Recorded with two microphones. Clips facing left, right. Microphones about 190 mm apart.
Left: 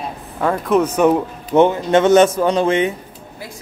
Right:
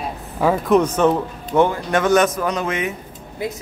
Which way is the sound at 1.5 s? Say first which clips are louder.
Left 4 dB; 20° left (ahead or behind).